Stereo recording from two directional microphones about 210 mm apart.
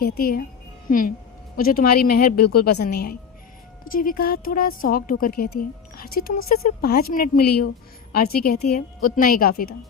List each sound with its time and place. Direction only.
0.0 s speech: 45° left (ahead or behind)